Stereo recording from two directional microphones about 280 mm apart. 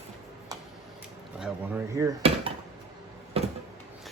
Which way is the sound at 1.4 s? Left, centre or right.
Centre.